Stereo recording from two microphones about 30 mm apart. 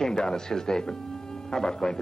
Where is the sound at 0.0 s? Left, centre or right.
Centre.